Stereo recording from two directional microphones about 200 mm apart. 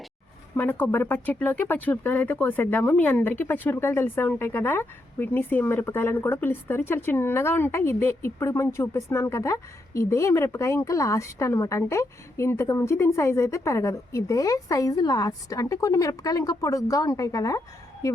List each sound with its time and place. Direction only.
0.5 s speech: 10° left (ahead or behind)